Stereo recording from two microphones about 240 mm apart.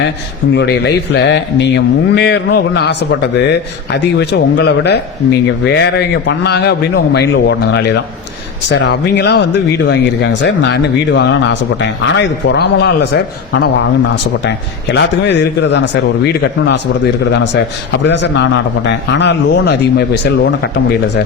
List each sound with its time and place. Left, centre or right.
0.5 s speech: left